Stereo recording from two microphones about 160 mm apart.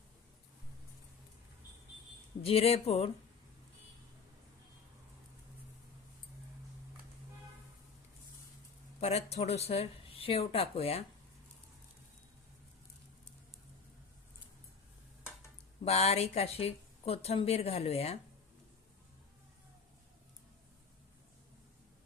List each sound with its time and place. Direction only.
2.4 s speech: 40° left (ahead or behind)
9.0 s speech: 40° left (ahead or behind)
15.8 s speech: 40° left (ahead or behind)